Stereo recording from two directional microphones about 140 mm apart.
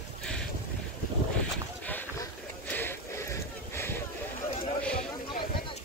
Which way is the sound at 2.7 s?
15° left (ahead or behind).